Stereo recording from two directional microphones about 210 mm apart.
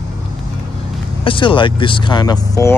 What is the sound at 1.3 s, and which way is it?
Speech, 25° left (ahead or behind).